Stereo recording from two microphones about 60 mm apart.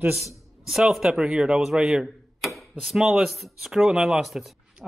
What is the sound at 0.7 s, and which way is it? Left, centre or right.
Speech, centre.